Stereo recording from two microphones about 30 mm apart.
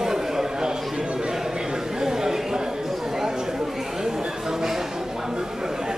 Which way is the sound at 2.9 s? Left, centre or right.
Centre.